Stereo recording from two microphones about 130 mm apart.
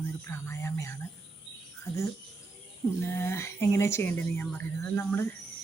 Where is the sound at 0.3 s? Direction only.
20° left (ahead or behind).